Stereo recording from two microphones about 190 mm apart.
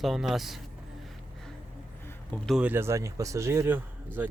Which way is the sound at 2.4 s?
5° right (ahead or behind).